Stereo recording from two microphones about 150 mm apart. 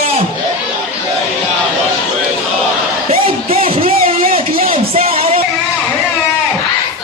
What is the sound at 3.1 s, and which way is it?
Music, 40° right (ahead or behind).